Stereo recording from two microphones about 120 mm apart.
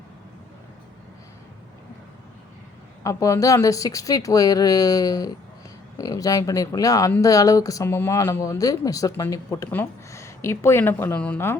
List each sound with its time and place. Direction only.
3.0 s speech: 25° left (ahead or behind)